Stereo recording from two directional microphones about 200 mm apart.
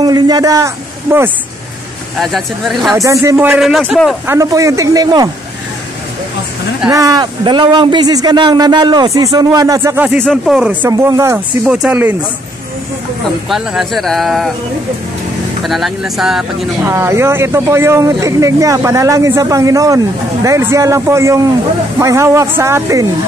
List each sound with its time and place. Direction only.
0.0 s a sound: 20° right (ahead or behind)
2.1 s speech: centre (ahead or behind)
3.0 s speech: 15° right (ahead or behind)
4.3 s speech: 15° right (ahead or behind)
6.9 s speech: 15° right (ahead or behind)
13.5 s speech: centre (ahead or behind)
15.6 s speech: centre (ahead or behind)
16.9 s speech: 10° right (ahead or behind)